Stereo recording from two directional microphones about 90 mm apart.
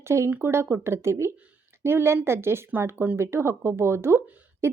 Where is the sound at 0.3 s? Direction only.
25° right (ahead or behind).